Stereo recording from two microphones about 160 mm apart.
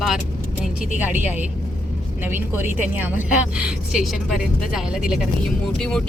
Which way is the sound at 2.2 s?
10° right (ahead or behind).